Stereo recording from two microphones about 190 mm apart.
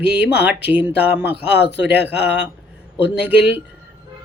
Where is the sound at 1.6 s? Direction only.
65° left (ahead or behind).